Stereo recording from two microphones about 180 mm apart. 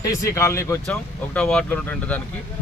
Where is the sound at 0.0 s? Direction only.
20° left (ahead or behind).